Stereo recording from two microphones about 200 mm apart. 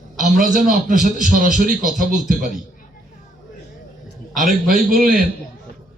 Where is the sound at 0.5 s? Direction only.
40° right (ahead or behind).